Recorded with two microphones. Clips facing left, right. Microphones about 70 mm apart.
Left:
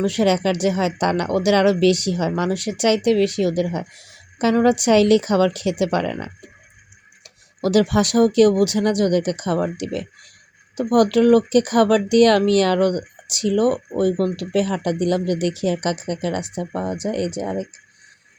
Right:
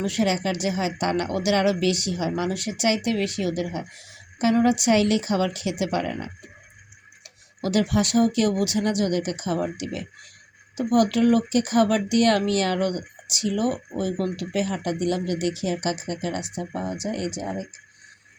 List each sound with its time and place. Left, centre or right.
0.0 s speech: left
7.6 s speech: left